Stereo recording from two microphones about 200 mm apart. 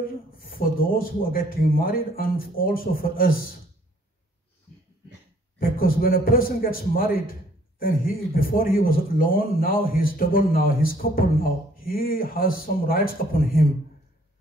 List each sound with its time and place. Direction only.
0.3 s a man's voice: 45° left (ahead or behind)
5.6 s a man's voice: 45° left (ahead or behind)